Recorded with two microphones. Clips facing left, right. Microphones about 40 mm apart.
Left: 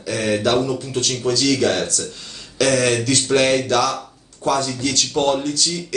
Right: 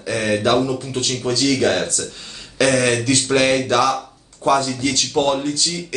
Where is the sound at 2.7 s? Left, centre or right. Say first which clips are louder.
Right 1 dB; centre.